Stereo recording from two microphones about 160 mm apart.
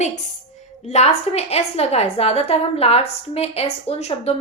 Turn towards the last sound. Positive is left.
turn(degrees=40)  # may be behind; listen again after turning